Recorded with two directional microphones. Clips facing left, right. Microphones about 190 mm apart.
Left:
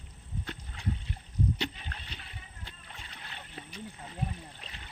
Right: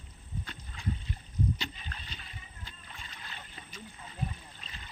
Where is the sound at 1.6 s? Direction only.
65° left (ahead or behind).